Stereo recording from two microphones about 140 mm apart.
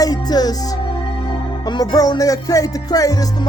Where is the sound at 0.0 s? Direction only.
30° left (ahead or behind).